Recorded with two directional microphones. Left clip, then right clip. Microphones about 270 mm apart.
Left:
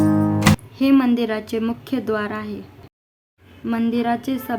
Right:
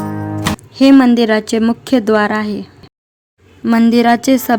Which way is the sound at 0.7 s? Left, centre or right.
Right.